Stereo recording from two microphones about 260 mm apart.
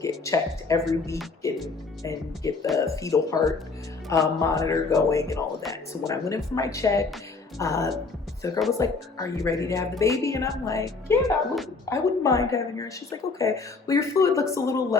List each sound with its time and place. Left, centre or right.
0.0 s speech: centre
1.4 s music: centre
2.0 s a woman's voice: centre